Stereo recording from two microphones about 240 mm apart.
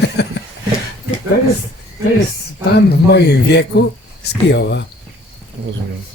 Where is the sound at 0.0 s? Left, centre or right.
Left.